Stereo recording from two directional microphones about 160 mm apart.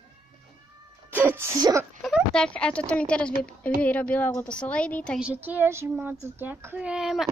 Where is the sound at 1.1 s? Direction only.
15° right (ahead or behind).